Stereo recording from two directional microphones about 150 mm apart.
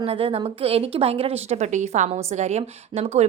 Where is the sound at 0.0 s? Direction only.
40° right (ahead or behind).